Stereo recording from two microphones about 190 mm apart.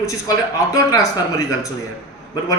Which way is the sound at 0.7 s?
15° left (ahead or behind).